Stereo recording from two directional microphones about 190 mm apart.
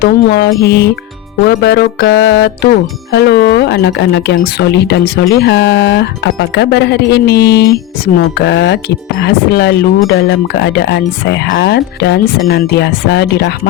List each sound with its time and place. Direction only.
0.0 s speech: 60° left (ahead or behind)